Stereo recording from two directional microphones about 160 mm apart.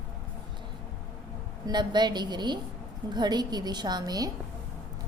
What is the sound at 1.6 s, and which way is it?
A woman's voice, 25° right (ahead or behind).